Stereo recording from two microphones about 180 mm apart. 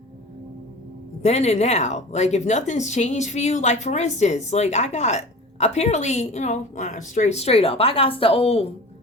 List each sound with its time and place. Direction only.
1.2 s a woman's voice: 40° left (ahead or behind)